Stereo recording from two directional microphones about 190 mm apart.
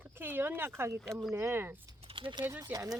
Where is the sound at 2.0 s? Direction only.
25° right (ahead or behind).